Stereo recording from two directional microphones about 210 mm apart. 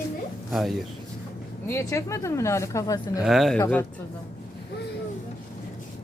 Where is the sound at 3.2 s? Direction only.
Centre (ahead or behind).